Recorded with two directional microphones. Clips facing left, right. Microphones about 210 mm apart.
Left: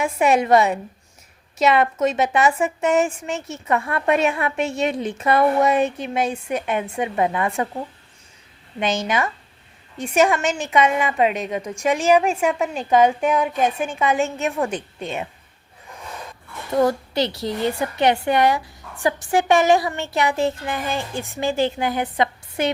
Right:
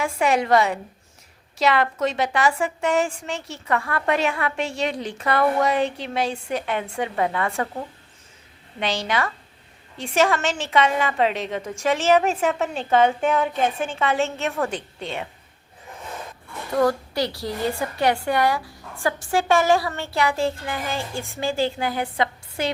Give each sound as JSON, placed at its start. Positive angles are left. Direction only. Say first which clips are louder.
{"t": 0.0, "sound": "a woman's voice", "louder": "left 3 dB", "side_deg": 20}
{"t": 8.8, "sound": "a woman's voice", "louder": "left 3 dB", "side_deg": 20}
{"t": 16.7, "sound": "a woman's voice", "louder": "left 2 dB", "side_deg": 20}